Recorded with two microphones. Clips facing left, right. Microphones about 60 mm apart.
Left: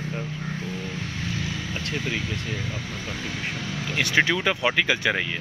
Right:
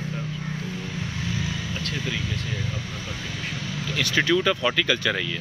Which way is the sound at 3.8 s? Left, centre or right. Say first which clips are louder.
Left 1 dB; left.